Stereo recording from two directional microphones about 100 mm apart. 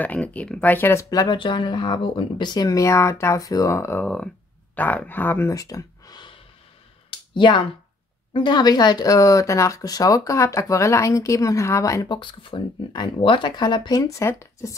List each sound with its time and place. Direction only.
0.0 s speech: 15° left (ahead or behind)
1.1 s speech: 50° left (ahead or behind); by 4.0 s 30° left (ahead or behind)
4.0 s speech: 10° left (ahead or behind)
5.5 s a sound: 35° left (ahead or behind); by 7.6 s 50° left (ahead or behind)
8.3 s speech: 50° left (ahead or behind); by 12.1 s 35° left (ahead or behind)
12.1 s speech: 55° left (ahead or behind); by 14.8 s 30° left (ahead or behind)